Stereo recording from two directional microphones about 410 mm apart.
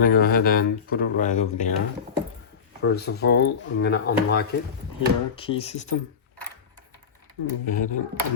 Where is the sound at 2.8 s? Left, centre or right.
Left.